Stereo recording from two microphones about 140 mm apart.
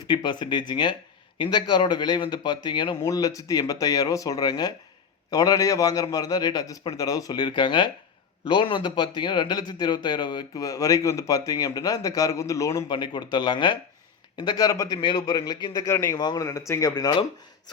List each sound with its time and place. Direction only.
0.1 s a man's voice: 30° left (ahead or behind)
16.9 s speech: 30° left (ahead or behind)